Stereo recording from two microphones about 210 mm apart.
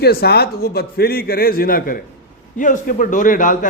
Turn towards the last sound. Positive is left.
turn(degrees=40)  # may be behind; listen again after turning